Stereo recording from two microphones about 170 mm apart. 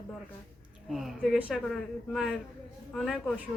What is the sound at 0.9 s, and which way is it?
Speech, 5° right (ahead or behind).